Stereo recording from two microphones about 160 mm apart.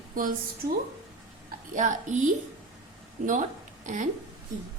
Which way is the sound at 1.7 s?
50° right (ahead or behind).